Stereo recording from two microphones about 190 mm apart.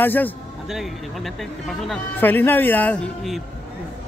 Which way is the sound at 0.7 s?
Centre (ahead or behind).